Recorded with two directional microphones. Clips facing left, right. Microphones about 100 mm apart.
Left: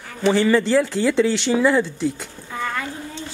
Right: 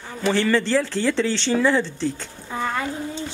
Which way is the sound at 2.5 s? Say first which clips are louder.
Right 1 dB; 20° right (ahead or behind).